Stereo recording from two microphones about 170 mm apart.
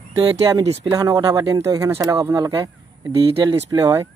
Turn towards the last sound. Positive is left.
turn(degrees=-20)  # may be behind; listen again after turning